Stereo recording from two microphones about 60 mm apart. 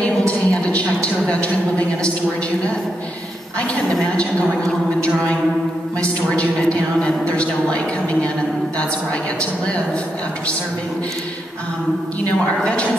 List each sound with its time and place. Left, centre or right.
0.3 s a sound: left
4.2 s a woman's voice: centre
12.3 s a woman's voice: left